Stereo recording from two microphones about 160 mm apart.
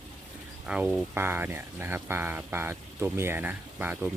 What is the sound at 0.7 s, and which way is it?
Speech, 5° right (ahead or behind).